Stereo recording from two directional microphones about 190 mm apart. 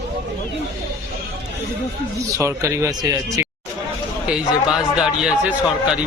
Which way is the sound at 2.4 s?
15° right (ahead or behind).